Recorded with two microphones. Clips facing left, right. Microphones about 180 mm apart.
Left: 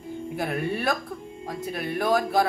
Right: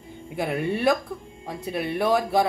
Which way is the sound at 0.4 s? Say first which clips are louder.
Right 3 dB; 20° right (ahead or behind).